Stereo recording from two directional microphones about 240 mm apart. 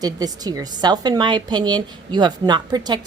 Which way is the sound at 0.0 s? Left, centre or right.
Centre.